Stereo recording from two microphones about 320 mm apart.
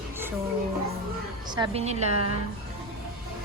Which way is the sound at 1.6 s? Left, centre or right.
Centre.